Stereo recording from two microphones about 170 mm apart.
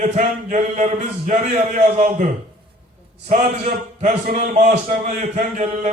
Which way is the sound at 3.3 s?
55° right (ahead or behind).